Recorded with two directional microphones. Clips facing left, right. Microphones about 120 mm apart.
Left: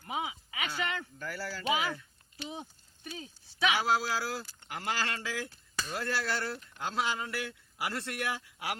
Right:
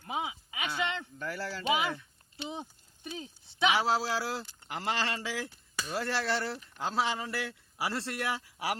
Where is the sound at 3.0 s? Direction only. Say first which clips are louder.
Right 3 dB; 25° right (ahead or behind).